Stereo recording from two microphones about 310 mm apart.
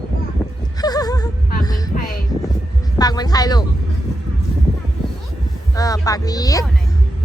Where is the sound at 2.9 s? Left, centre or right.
Centre.